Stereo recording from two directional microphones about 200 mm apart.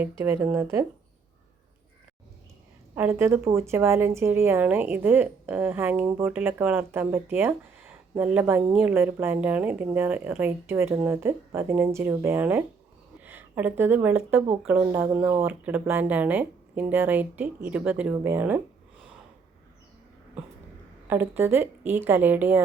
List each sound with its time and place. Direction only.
0.0 s a woman's voice: 10° right (ahead or behind)
2.9 s a woman's voice: 10° right (ahead or behind)
21.1 s a woman's voice: 10° right (ahead or behind)